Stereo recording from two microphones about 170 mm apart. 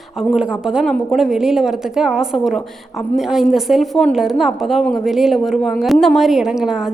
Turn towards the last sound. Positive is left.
turn(degrees=-5)  # may be behind; listen again after turning